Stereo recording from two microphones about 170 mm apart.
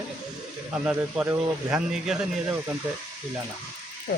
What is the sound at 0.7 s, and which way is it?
Speech, 10° right (ahead or behind).